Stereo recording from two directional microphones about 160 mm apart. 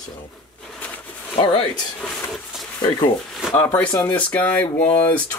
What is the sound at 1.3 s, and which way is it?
Speech, 35° left (ahead or behind).